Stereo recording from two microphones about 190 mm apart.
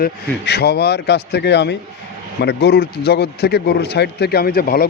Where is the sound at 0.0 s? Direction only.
60° left (ahead or behind).